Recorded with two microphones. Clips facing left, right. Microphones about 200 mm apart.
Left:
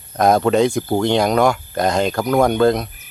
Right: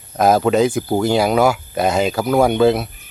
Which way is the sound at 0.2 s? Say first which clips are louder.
Even; 5° right (ahead or behind).